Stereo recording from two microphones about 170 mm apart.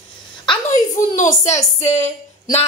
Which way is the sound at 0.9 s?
50° left (ahead or behind).